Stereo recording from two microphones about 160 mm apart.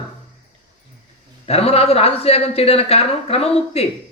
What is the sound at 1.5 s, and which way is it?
Speech, 40° left (ahead or behind).